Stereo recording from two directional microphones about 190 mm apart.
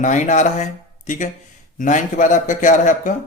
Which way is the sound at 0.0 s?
40° left (ahead or behind).